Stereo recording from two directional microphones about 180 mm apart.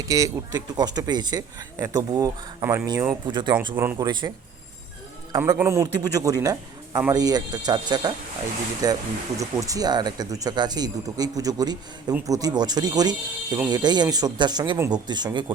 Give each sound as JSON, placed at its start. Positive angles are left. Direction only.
{"t": 0.1, "sound": "speech", "side_deg": -20}
{"t": 5.3, "sound": "speech", "side_deg": -15}